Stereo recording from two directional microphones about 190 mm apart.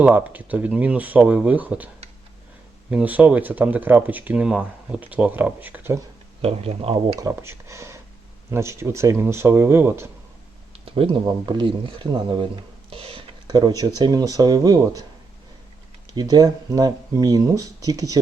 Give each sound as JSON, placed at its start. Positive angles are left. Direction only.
{"t": 0.0, "sound": "speech", "side_deg": -10}
{"t": 2.9, "sound": "speech", "side_deg": -10}
{"t": 6.4, "sound": "speech", "side_deg": -30}
{"t": 7.2, "sound": "speech", "side_deg": -15}
{"t": 10.7, "sound": "speech", "side_deg": -30}
{"t": 16.1, "sound": "speech", "side_deg": -20}